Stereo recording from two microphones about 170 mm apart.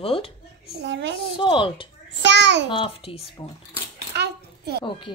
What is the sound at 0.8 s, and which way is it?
Speech, 90° right.